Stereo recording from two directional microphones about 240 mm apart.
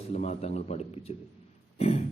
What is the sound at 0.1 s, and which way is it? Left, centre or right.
A man's voice, left.